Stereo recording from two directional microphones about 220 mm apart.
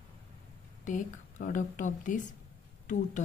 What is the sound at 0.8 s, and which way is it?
A woman's voice, 35° left (ahead or behind).